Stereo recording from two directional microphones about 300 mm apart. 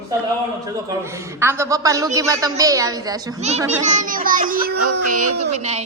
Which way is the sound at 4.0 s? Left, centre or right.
Right.